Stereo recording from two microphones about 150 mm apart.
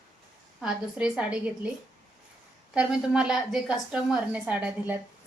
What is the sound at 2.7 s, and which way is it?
A woman's voice, 5° right (ahead or behind).